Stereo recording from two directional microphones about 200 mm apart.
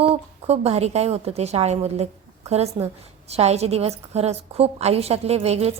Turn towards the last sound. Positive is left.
turn(degrees=-30)  # may be behind; listen again after turning